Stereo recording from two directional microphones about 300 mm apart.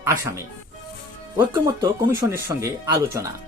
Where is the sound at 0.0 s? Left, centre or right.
Centre.